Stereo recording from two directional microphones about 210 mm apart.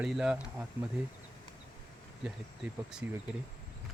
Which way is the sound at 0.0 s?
5° right (ahead or behind).